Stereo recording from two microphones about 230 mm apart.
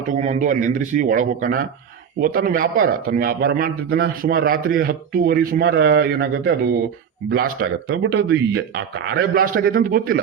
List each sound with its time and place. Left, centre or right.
0.1 s a man's voice: right